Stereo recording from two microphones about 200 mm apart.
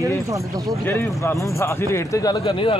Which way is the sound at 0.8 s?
10° left (ahead or behind).